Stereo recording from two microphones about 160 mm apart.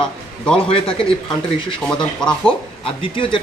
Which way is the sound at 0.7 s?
35° left (ahead or behind).